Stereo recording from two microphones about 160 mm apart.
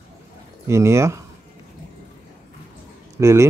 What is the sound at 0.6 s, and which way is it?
Speech, 15° right (ahead or behind).